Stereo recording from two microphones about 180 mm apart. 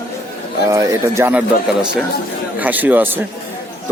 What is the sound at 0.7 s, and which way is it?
Speech, 15° right (ahead or behind).